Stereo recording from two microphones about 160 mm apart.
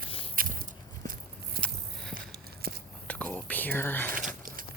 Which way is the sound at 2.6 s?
70° right (ahead or behind).